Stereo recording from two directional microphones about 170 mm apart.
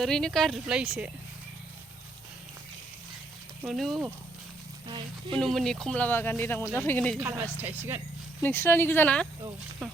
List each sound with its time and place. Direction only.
0.0 s speech: 5° left (ahead or behind)
3.7 s speech: centre (ahead or behind)
4.9 s speech: 30° right (ahead or behind)
5.4 s speech: centre (ahead or behind)
7.2 s speech: 10° right (ahead or behind)
8.4 s speech: 15° left (ahead or behind)